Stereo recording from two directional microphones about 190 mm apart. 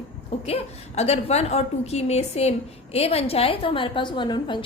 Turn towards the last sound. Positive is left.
turn(degrees=25)  # may be behind; listen again after turning